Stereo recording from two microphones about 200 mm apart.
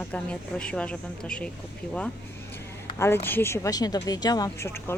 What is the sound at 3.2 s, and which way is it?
Speech, 10° left (ahead or behind).